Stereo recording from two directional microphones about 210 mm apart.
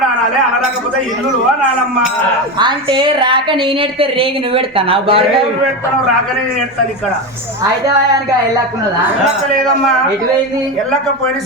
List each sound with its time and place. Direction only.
2.6 s a woman's voice: 20° right (ahead or behind)